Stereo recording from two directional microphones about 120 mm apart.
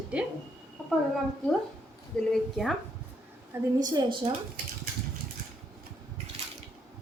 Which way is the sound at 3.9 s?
45° right (ahead or behind).